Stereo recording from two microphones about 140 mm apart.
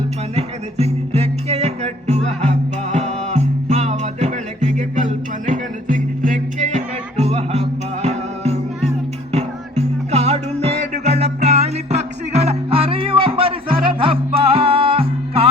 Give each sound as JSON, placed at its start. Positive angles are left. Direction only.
{"t": 0.3, "sound": "music", "side_deg": -50}